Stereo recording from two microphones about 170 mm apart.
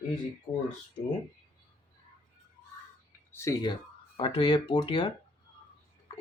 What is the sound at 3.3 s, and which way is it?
Speech, 20° left (ahead or behind).